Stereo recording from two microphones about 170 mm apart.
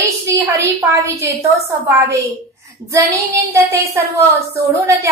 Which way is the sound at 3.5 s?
15° right (ahead or behind).